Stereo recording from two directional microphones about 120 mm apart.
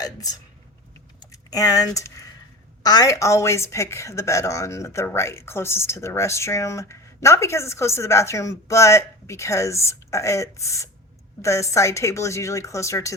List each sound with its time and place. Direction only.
0.0 s a woman's voice: 30° left (ahead or behind)